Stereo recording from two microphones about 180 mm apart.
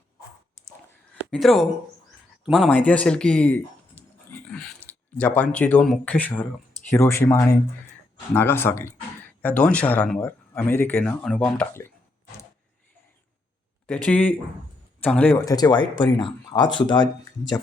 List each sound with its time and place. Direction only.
1.3 s speech: centre (ahead or behind)
13.8 s speech: 5° left (ahead or behind)
15.4 s speech: 20° left (ahead or behind)